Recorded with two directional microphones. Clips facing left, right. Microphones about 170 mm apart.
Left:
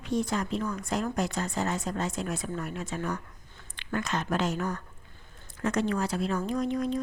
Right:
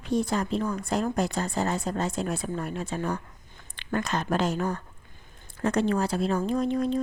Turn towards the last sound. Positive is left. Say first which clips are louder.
# right 3 dB
turn(degrees=-30)  # may be behind; listen again after turning